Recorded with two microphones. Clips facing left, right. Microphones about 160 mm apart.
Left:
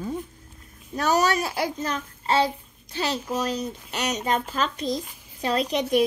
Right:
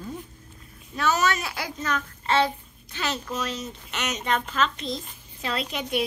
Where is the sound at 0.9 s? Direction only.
40° left (ahead or behind).